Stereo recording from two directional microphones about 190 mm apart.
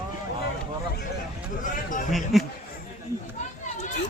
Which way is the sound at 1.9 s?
40° left (ahead or behind).